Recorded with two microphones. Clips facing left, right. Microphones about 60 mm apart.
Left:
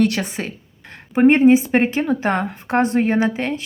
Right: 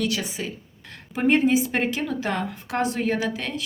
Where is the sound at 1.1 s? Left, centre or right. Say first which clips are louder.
Left 8 dB; left.